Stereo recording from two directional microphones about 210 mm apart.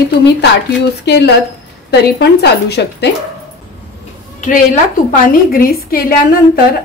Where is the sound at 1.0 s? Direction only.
55° left (ahead or behind).